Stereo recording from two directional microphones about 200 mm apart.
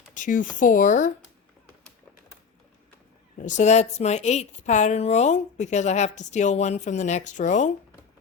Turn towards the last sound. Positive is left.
turn(degrees=40)  # may be behind; listen again after turning